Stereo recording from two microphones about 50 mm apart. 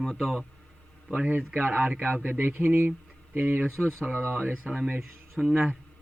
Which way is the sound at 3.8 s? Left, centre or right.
Centre.